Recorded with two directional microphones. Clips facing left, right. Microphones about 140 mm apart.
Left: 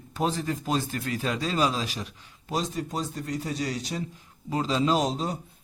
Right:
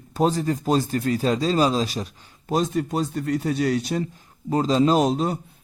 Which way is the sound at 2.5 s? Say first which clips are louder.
Right 7 dB; 55° right (ahead or behind).